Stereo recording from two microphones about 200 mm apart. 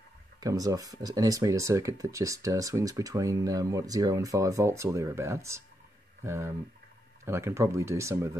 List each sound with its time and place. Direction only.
0.4 s speech: 15° right (ahead or behind)